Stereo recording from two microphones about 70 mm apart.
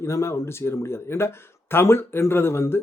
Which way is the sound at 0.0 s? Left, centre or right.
Left.